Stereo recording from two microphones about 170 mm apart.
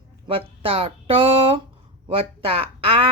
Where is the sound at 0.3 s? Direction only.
35° right (ahead or behind).